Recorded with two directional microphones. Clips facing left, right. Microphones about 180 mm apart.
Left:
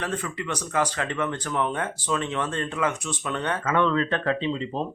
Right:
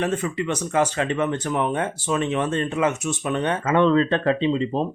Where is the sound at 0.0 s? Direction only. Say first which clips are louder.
Right 6 dB; 25° right (ahead or behind).